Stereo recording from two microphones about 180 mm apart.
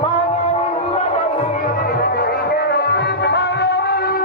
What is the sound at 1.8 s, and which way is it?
Music, 60° left (ahead or behind).